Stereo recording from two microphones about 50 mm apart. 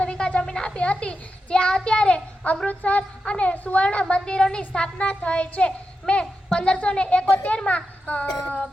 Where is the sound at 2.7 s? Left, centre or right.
Left.